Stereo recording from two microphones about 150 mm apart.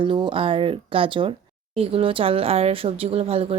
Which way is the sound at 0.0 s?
35° right (ahead or behind).